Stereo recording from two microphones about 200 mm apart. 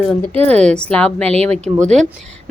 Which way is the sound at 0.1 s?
5° left (ahead or behind).